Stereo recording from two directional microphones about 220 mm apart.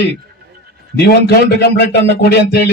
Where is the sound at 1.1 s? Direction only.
45° left (ahead or behind).